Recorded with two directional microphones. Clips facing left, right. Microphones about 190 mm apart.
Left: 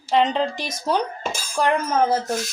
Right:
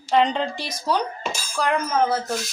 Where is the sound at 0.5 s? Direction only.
20° left (ahead or behind).